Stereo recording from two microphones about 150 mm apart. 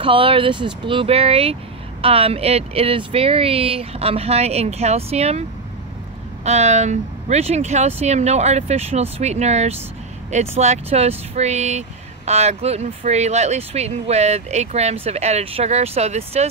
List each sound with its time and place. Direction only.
0.0 s speech: 35° right (ahead or behind)
6.4 s speech: 45° right (ahead or behind)